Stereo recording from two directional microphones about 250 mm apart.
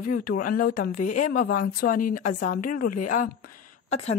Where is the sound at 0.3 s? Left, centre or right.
Left.